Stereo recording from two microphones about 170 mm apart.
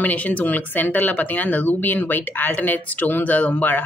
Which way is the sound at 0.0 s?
10° left (ahead or behind).